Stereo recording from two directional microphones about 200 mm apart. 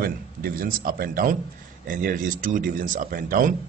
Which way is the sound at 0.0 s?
50° right (ahead or behind).